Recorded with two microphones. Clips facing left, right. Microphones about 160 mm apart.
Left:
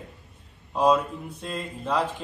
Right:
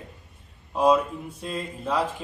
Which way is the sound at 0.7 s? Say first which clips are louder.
Right 1 dB; 10° right (ahead or behind).